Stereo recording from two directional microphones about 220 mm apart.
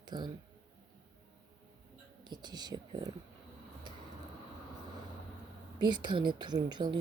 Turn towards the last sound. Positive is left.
turn(degrees=-20)  # may be behind; listen again after turning